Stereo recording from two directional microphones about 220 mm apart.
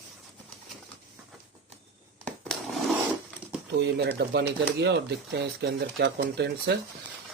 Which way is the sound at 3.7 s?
50° right (ahead or behind).